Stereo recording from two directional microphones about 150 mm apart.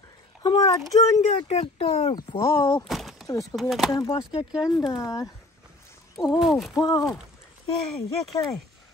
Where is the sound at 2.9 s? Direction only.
Centre (ahead or behind).